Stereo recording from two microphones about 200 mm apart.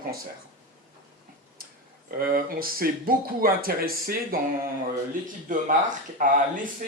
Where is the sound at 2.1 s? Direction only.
50° right (ahead or behind).